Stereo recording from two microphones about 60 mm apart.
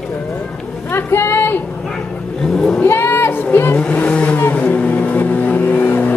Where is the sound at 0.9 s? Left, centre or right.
Left.